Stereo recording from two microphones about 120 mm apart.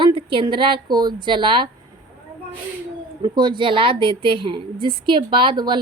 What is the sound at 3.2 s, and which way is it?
A woman's voice, 40° right (ahead or behind).